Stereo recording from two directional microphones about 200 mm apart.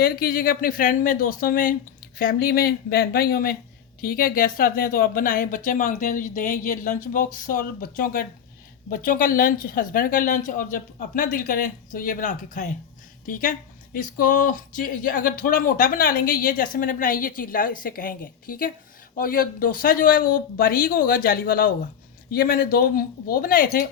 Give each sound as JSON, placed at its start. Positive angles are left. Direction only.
{"t": 0.0, "sound": "speech", "side_deg": 50}